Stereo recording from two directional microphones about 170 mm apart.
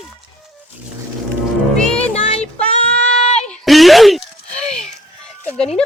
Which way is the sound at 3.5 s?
Centre (ahead or behind).